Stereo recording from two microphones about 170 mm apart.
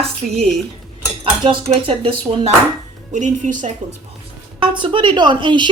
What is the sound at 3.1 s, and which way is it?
Speech, 45° right (ahead or behind).